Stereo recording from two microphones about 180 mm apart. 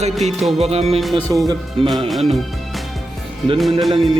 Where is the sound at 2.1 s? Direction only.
Centre (ahead or behind).